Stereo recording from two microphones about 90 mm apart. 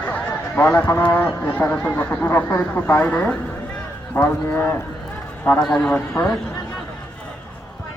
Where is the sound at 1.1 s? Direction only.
25° left (ahead or behind).